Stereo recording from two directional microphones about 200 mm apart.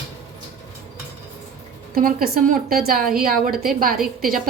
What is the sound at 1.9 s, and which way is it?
A woman's voice, 45° right (ahead or behind).